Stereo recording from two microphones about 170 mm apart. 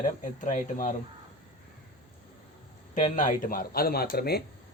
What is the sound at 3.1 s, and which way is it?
Speech, 50° left (ahead or behind).